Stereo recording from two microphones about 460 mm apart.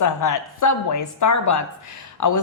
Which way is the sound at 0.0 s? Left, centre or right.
Left.